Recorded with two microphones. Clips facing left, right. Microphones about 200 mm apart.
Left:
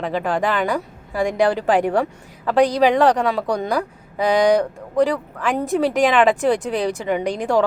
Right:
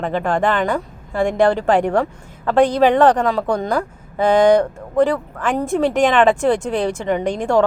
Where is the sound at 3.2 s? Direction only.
15° left (ahead or behind).